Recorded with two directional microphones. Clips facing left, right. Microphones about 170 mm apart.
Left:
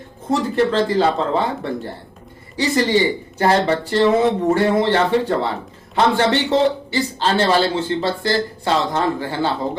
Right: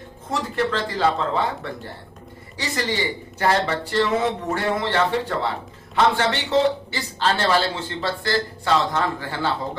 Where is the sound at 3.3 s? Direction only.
30° left (ahead or behind).